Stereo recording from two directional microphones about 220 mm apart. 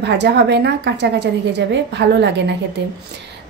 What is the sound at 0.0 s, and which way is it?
Speech, 50° right (ahead or behind).